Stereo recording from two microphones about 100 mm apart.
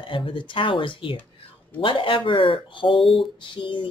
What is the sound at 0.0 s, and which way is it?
Speech, 55° left (ahead or behind).